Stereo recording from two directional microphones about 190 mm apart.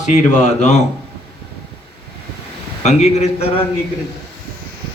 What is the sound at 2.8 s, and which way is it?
Speech, 35° left (ahead or behind).